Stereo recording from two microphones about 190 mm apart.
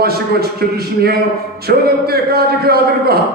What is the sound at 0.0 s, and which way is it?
A man's voice, 55° right (ahead or behind).